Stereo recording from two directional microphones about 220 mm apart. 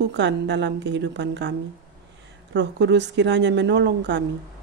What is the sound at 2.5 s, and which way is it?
A woman's voice, 50° right (ahead or behind).